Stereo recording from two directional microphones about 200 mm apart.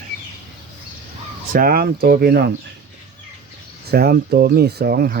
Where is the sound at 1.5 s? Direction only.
50° right (ahead or behind).